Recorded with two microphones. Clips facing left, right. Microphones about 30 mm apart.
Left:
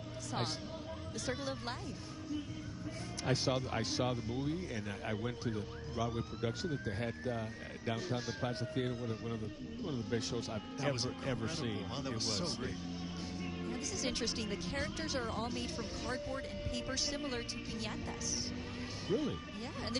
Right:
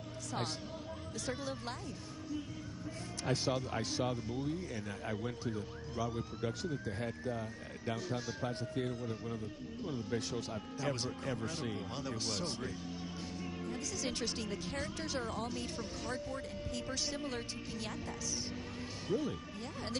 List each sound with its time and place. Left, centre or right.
0.3 s a man's voice: centre
3.3 s speech: centre
9.8 s speech: centre